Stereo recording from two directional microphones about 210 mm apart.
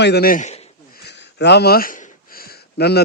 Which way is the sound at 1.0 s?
55° left (ahead or behind).